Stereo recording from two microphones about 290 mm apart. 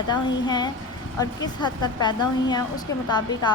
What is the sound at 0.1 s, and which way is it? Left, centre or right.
A woman's voice, centre.